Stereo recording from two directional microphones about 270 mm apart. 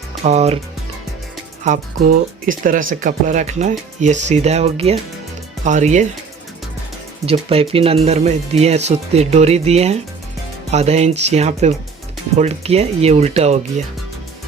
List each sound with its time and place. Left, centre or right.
0.3 s speech: right
1.6 s speech: right
7.3 s speech: right